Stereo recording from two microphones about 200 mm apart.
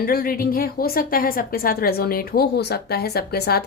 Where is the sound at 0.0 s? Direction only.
45° left (ahead or behind).